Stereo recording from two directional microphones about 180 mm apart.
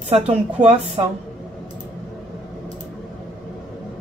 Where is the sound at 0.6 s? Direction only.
35° right (ahead or behind).